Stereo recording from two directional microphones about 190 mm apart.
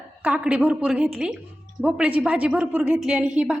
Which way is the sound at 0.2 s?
10° right (ahead or behind).